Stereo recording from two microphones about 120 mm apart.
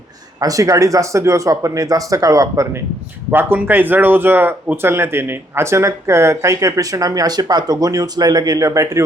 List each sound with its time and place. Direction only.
0.3 s speech: 30° right (ahead or behind)
3.2 s speech: 15° right (ahead or behind)